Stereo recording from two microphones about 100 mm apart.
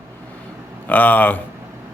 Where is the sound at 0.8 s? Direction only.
15° left (ahead or behind).